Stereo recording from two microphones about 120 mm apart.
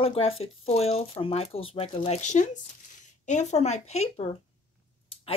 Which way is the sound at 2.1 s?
80° left.